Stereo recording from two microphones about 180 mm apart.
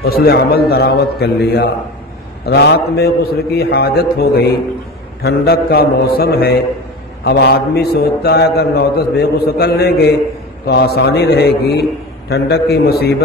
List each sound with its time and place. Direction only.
0.0 s a man's voice: 60° left (ahead or behind)